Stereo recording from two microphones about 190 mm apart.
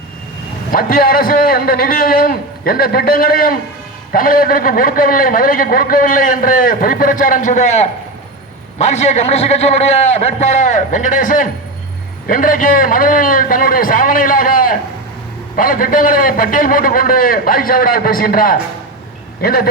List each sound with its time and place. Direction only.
0.7 s a man's voice: 50° left (ahead or behind)
8.8 s a man's voice: 35° left (ahead or behind); by 19.6 s 50° left (ahead or behind)